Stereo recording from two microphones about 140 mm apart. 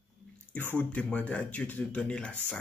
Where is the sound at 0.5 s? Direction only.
15° left (ahead or behind).